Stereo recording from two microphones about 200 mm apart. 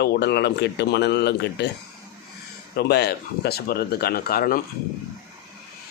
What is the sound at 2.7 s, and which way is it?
Speech, 55° left (ahead or behind).